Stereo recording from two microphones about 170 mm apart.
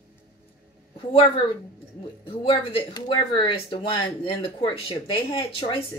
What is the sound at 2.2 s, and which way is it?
Speech, 30° left (ahead or behind).